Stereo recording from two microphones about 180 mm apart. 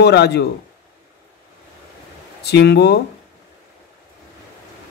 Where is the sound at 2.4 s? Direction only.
65° left (ahead or behind).